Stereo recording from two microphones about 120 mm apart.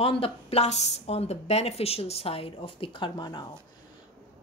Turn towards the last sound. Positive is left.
turn(degrees=40)  # may be behind; listen again after turning